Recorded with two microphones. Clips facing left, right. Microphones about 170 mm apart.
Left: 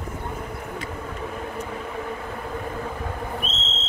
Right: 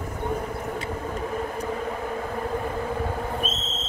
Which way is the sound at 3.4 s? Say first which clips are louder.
Right 3 dB; 70° left (ahead or behind).